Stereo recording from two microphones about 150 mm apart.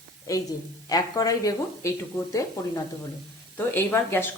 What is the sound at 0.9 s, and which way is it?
Speech, 25° left (ahead or behind).